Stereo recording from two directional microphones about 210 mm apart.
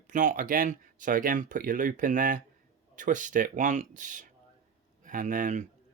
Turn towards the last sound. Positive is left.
turn(degrees=-35)  # may be behind; listen again after turning